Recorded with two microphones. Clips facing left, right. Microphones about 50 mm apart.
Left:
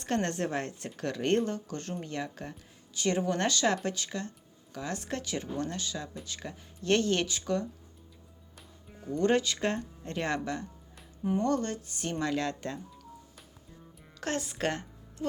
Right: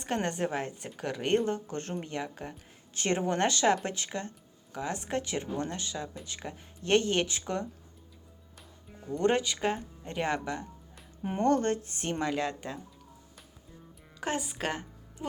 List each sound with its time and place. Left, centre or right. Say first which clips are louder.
0.0 s speech: even; centre
1.5 s speech: right 2 dB; right
2.0 s speech: even; centre
2.9 s speech: even; right
8.9 s music: left 1 dB; centre
9.1 s speech: even; centre
11.2 s speech: right 1 dB; right
11.5 s speech: right 4 dB; right
12.2 s speech: left 1 dB; centre
14.2 s speech: even; centre